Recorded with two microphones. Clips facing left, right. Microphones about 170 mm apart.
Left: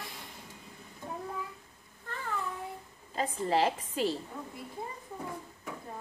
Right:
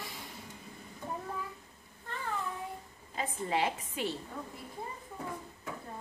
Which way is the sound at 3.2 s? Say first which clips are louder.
Left 4 dB; 35° left (ahead or behind).